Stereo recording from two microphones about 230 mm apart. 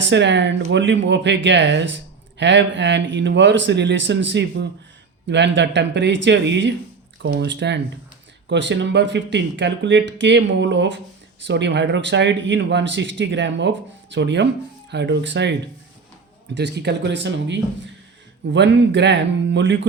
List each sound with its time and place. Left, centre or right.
0.0 s speech: right
16.6 s speech: right